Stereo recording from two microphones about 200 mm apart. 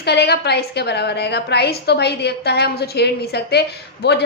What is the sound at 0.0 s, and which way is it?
A woman's voice, 55° left (ahead or behind).